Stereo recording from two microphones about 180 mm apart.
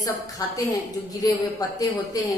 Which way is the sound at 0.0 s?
20° left (ahead or behind).